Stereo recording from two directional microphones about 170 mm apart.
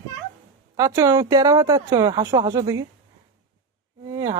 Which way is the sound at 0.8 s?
20° right (ahead or behind).